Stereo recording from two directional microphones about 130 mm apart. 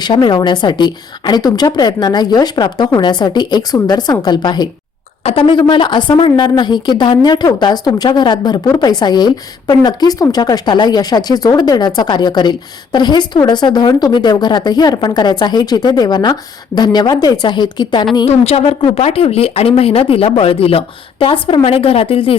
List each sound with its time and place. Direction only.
0.0 s speech: 35° left (ahead or behind)
5.2 s speech: 45° left (ahead or behind)
18.3 s speech: 50° left (ahead or behind)